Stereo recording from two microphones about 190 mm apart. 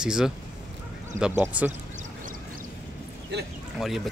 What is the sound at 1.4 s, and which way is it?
Speech, 10° right (ahead or behind).